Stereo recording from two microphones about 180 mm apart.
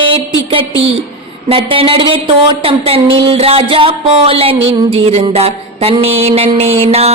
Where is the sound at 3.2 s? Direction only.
30° right (ahead or behind).